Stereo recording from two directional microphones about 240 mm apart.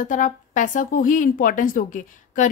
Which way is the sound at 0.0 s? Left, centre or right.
Left.